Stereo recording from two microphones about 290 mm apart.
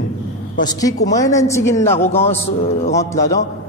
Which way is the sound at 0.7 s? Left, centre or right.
Centre.